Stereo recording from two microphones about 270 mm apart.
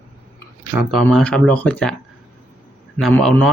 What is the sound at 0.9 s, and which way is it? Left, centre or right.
Speech, centre.